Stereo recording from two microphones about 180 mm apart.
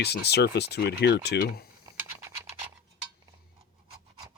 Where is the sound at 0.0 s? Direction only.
65° left (ahead or behind).